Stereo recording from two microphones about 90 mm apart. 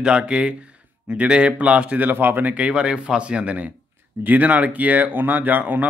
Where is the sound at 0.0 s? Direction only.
10° right (ahead or behind).